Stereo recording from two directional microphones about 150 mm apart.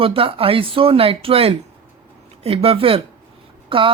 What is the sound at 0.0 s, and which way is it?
A woman's voice, 35° right (ahead or behind).